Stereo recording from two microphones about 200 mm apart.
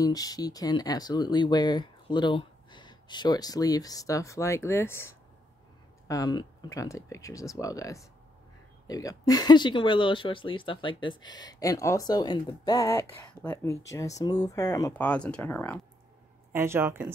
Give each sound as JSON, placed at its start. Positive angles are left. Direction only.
{"t": 0.0, "sound": "speech", "side_deg": 20}
{"t": 16.5, "sound": "speech", "side_deg": -10}